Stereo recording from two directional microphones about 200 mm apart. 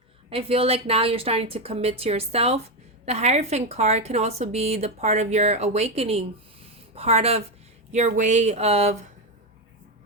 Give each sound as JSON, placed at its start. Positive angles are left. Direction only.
{"t": 0.3, "sound": "a woman's voice", "side_deg": -30}